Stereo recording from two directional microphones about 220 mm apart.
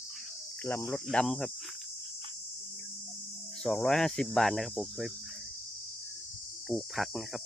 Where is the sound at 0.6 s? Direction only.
10° left (ahead or behind).